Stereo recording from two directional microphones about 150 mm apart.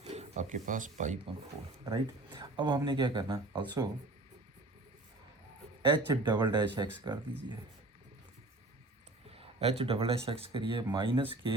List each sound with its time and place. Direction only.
0.0 s speech: 45° right (ahead or behind)
1.8 s speech: 25° right (ahead or behind)
5.8 s speech: 35° right (ahead or behind)
9.3 s speech: 40° right (ahead or behind)